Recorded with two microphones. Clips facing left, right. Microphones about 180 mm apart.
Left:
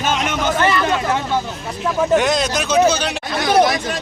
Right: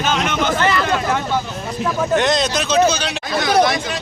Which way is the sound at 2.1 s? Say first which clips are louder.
Even; 5° left (ahead or behind).